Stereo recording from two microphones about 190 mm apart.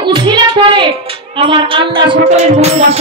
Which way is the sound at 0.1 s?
25° right (ahead or behind).